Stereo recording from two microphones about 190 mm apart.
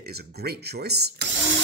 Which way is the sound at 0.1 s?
55° right (ahead or behind).